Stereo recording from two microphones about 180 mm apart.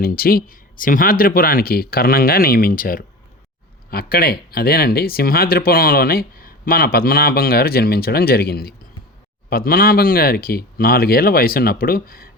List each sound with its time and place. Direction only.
0.0 s speech: 55° left (ahead or behind)